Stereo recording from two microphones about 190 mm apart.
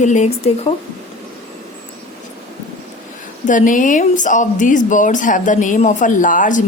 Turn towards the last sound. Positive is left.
turn(degrees=45)  # may be behind; listen again after turning